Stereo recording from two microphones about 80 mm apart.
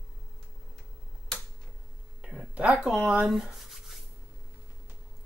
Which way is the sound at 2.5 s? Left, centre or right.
Centre.